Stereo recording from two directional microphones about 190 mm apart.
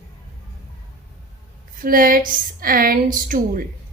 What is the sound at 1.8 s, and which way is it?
A woman's voice, 50° right (ahead or behind).